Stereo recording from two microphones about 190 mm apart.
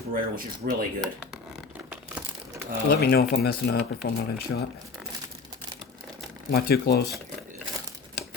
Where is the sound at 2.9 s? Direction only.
55° left (ahead or behind).